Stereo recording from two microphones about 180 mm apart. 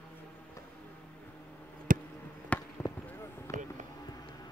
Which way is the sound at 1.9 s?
50° right (ahead or behind).